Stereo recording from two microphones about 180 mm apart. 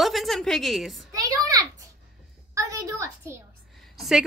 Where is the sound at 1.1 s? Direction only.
20° right (ahead or behind).